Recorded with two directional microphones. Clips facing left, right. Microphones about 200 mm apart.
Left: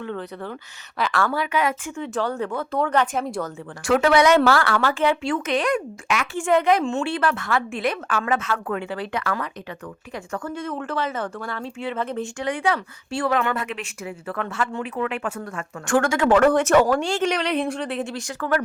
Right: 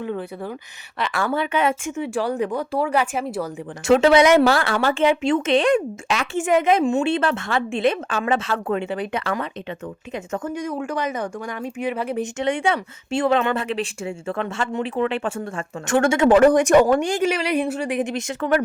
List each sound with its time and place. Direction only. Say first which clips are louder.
0.0 s a woman's voice: right 3 dB; 10° right (ahead or behind)
0.9 s a woman's voice: left 1 dB; centre (ahead or behind)
1.2 s speech: right 3 dB; 25° right (ahead or behind)
2.0 s a woman's voice: right 1 dB; 15° right (ahead or behind)
3.8 s speech: right 3 dB; 25° right (ahead or behind)
6.4 s speech: right 1 dB; 20° right (ahead or behind)